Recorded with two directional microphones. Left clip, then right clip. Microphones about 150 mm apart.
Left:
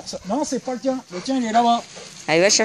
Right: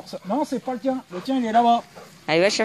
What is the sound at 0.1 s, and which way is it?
Speech, 20° left (ahead or behind).